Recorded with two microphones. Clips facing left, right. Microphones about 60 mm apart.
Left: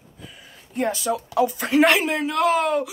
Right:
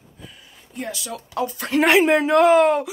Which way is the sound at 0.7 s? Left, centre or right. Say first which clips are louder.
Left 7 dB; left.